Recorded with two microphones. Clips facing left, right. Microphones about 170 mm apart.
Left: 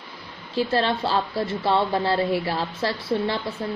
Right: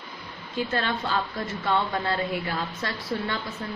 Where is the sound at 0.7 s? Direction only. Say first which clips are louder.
Left 5 dB; 30° left (ahead or behind).